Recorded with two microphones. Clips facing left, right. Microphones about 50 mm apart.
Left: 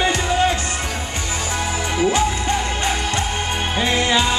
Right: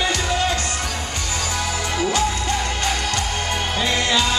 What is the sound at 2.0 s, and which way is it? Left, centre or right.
Music, left.